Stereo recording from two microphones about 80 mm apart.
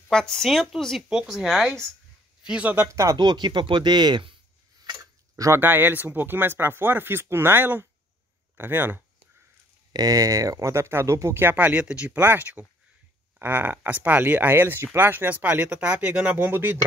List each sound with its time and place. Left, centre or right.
0.1 s speech: centre
2.4 s speech: centre
2.9 s speech: right
3.2 s speech: right
4.8 s tick-tock: right
5.7 s speech: right
9.9 s speech: right; by 12.2 s centre
12.2 s speech: right